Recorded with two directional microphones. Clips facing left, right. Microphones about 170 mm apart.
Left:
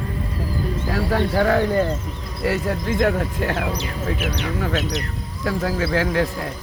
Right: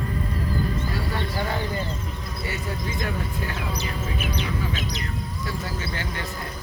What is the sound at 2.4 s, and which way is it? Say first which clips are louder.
Speech: left 10 dB; 85° left.